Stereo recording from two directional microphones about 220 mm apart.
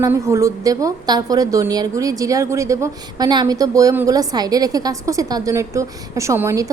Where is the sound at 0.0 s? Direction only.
15° right (ahead or behind).